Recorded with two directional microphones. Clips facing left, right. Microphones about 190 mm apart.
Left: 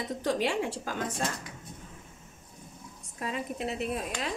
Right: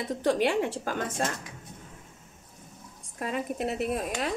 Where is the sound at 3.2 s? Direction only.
50° right (ahead or behind).